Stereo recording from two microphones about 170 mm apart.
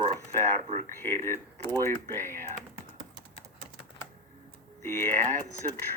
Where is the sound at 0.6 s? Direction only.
40° right (ahead or behind).